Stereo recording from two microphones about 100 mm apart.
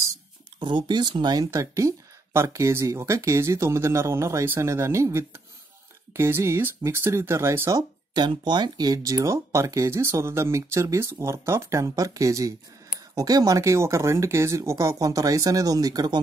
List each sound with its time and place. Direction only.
0.6 s speech: 50° right (ahead or behind); by 7.8 s 30° right (ahead or behind)
8.1 s speech: 50° right (ahead or behind)